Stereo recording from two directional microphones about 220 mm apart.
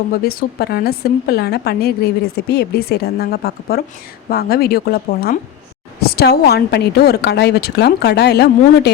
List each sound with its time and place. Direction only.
0.3 s a woman's voice: 45° left (ahead or behind)